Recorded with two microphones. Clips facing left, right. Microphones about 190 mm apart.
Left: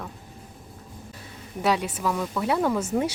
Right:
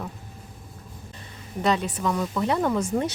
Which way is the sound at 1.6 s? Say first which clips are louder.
Even; 10° left (ahead or behind).